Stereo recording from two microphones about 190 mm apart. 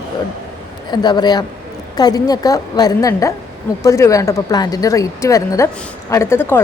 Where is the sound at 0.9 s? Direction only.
20° left (ahead or behind).